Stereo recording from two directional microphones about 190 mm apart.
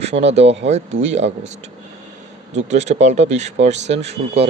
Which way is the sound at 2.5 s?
35° right (ahead or behind).